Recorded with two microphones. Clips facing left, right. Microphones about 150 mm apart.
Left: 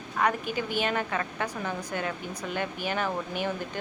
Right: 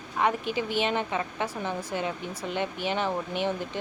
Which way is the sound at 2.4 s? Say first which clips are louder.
Right 2 dB; 25° right (ahead or behind).